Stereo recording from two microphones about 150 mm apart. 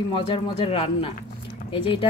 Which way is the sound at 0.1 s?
40° left (ahead or behind).